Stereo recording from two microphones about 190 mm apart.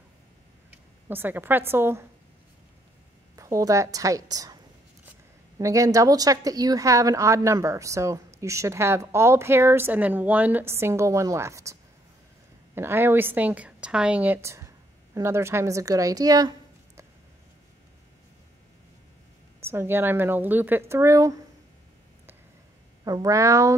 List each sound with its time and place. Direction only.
0.7 s a sound: 10° right (ahead or behind)
1.7 s a woman's voice: 10° right (ahead or behind)
3.3 s a woman's voice: 15° right (ahead or behind)
5.6 s a woman's voice: 15° right (ahead or behind)
12.7 s a woman's voice: 10° right (ahead or behind)
19.6 s a woman's voice: 10° right (ahead or behind)
23.0 s a woman's voice: 20° right (ahead or behind)